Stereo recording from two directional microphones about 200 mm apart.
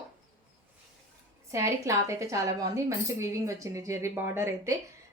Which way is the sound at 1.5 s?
15° right (ahead or behind).